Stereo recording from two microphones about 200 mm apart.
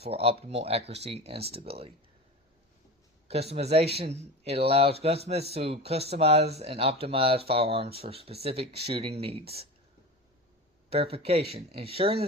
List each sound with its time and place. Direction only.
0.0 s speech: 30° right (ahead or behind)
3.2 s speech: 30° right (ahead or behind)
10.8 s speech: 30° right (ahead or behind)